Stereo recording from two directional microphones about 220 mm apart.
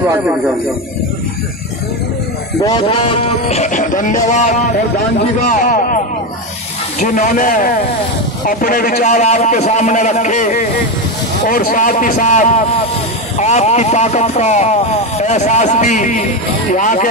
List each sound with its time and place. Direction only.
2.6 s speech: 20° left (ahead or behind); by 5.9 s 35° left (ahead or behind)
7.0 s speech: 35° left (ahead or behind)